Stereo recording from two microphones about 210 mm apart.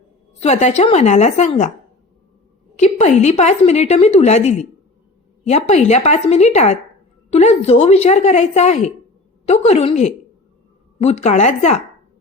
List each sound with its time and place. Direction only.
0.3 s a woman's voice: 30° left (ahead or behind)
2.7 s a woman's voice: 30° left (ahead or behind)